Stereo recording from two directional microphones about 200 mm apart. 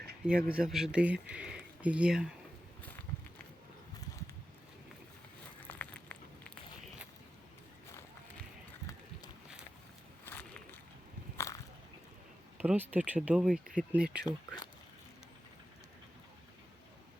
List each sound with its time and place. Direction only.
0.3 s speech: 5° right (ahead or behind)
5.6 s a sound: 5° left (ahead or behind)
12.5 s speech: 10° right (ahead or behind)
14.3 s speech: 20° left (ahead or behind)